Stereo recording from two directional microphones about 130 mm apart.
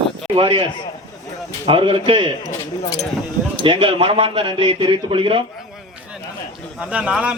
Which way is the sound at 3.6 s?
45° right (ahead or behind).